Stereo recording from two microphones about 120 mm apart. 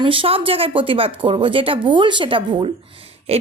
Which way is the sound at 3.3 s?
55° right (ahead or behind).